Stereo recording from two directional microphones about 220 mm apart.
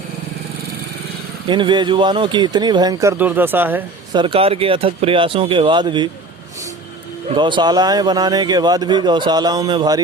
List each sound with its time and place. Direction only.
1.5 s speech: 20° right (ahead or behind)
4.1 s speech: 20° right (ahead or behind)
7.3 s speech: 20° right (ahead or behind)